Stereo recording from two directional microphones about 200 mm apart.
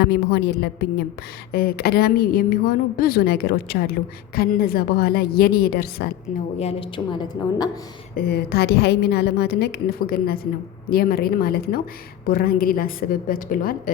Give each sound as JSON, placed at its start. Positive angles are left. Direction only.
{"t": 0.0, "sound": "a woman's voice", "side_deg": 55}
{"t": 6.6, "sound": "a woman's voice", "side_deg": 30}
{"t": 8.1, "sound": "a woman's voice", "side_deg": 50}